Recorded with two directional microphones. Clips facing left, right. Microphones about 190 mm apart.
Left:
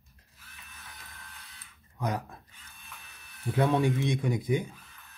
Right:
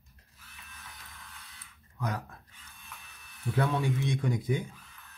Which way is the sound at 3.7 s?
20° left (ahead or behind).